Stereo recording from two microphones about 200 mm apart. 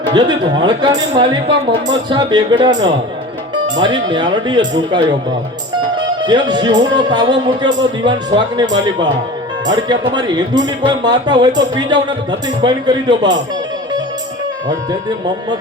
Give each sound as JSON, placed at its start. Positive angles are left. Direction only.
{"t": 0.1, "sound": "speech", "side_deg": -20}